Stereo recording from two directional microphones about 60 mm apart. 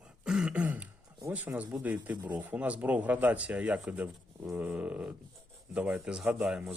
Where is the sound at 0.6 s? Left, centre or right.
Right.